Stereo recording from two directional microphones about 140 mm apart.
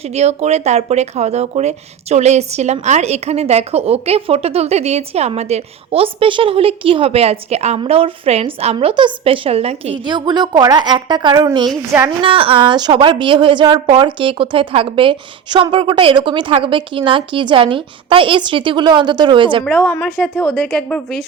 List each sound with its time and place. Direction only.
0.0 s a woman's voice: 50° right (ahead or behind)
10.1 s speech: 30° right (ahead or behind)
11.9 s a woman's voice: 15° right (ahead or behind)
12.2 s speech: 40° right (ahead or behind)
19.6 s a woman's voice: 15° left (ahead or behind)